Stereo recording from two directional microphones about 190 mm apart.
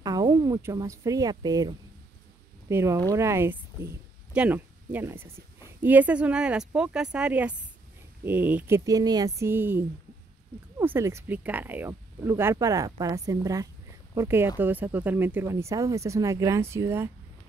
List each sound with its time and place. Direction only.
0.0 s speech: 20° right (ahead or behind)